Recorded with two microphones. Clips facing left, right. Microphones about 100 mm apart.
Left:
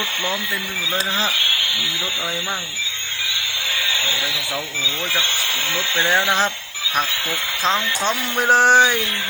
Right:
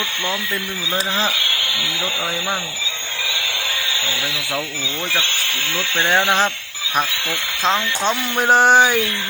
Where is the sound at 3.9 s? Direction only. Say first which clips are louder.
Right 1 dB; 5° right (ahead or behind).